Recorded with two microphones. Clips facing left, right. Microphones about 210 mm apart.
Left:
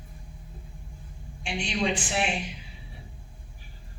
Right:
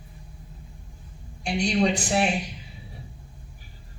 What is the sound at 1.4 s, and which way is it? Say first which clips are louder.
Speech: right 6 dB; 40° right (ahead or behind).